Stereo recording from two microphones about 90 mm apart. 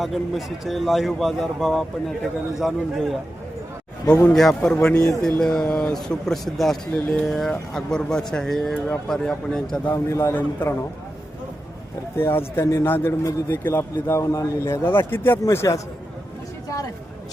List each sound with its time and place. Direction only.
0.0 s speech: centre (ahead or behind)
4.3 s a man's voice: 5° left (ahead or behind)
9.9 s a man's voice: 35° left (ahead or behind)
10.3 s a man's voice: 20° left (ahead or behind)
12.1 s a man's voice: 25° left (ahead or behind)
12.5 s a man's voice: 35° left (ahead or behind)
12.8 s a man's voice: 25° left (ahead or behind)